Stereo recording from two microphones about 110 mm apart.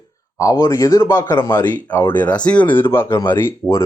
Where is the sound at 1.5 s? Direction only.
15° left (ahead or behind).